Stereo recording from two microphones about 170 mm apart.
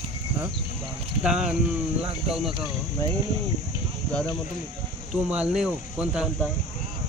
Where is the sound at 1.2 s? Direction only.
5° right (ahead or behind).